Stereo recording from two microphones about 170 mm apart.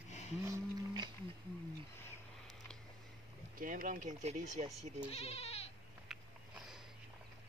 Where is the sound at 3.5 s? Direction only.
50° right (ahead or behind).